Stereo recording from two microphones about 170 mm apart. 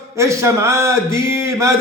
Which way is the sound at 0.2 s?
15° right (ahead or behind).